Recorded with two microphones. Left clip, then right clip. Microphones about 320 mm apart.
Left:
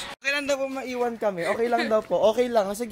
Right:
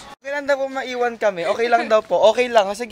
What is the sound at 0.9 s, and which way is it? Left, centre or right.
Speech, right.